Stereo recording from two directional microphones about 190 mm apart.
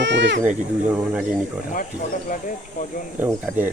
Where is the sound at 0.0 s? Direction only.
70° right (ahead or behind).